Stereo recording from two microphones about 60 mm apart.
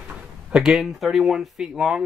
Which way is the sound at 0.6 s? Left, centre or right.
Centre.